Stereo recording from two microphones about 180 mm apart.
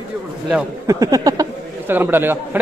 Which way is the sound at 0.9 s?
20° right (ahead or behind).